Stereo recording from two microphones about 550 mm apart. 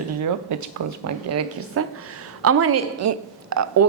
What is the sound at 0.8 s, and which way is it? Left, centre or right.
A woman's voice, right.